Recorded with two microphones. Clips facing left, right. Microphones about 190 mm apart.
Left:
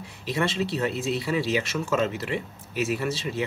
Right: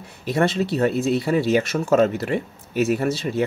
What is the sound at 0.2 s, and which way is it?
Speech, 50° right (ahead or behind).